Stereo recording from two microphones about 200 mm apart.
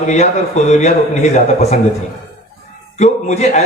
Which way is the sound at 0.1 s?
35° left (ahead or behind).